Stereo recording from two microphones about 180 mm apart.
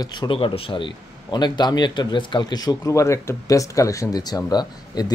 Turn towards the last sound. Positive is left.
turn(degrees=20)  # may be behind; listen again after turning